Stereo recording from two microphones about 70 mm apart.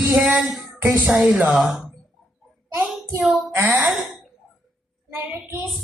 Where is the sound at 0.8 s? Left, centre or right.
Right.